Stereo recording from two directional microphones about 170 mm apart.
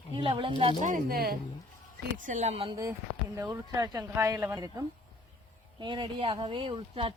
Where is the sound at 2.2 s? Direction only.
45° right (ahead or behind).